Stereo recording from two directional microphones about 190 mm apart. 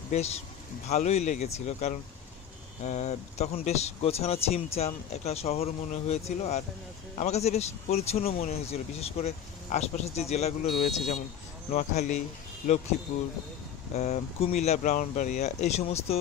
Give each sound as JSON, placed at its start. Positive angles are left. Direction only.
{"t": 0.1, "sound": "speech", "side_deg": 35}
{"t": 13.9, "sound": "speech", "side_deg": 35}